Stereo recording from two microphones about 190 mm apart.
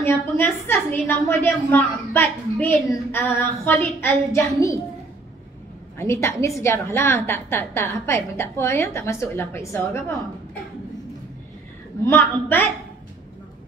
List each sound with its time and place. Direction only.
0.0 s a woman's voice: 10° left (ahead or behind)
5.9 s a woman's voice: 15° left (ahead or behind)
12.0 s a woman's voice: 10° left (ahead or behind)